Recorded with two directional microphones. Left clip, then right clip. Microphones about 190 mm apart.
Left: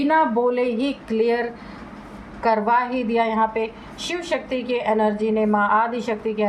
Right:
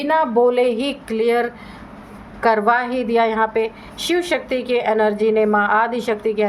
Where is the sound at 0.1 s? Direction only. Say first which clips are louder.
Right 4 dB; 50° right (ahead or behind).